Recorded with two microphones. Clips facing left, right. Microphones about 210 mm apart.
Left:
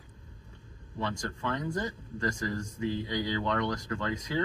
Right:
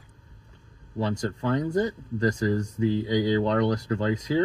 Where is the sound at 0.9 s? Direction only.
35° right (ahead or behind).